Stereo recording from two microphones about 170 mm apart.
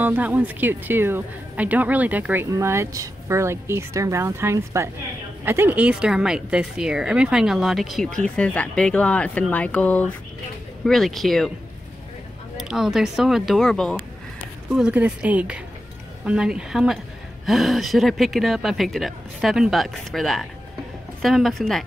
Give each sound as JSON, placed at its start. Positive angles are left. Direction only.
{"t": 0.0, "sound": "speech", "side_deg": -10}
{"t": 12.5, "sound": "speech", "side_deg": -5}